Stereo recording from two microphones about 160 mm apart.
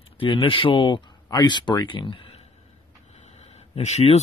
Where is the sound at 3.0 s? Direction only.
40° left (ahead or behind).